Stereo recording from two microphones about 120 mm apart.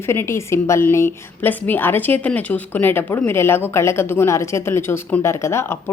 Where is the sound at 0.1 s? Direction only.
20° left (ahead or behind).